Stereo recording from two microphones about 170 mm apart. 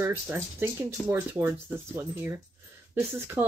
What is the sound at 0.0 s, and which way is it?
Speech, 15° right (ahead or behind).